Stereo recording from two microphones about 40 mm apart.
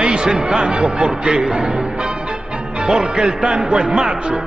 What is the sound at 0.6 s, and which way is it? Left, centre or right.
A man's voice, centre.